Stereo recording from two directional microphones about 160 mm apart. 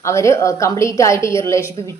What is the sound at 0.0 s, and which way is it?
A woman's voice, 15° left (ahead or behind).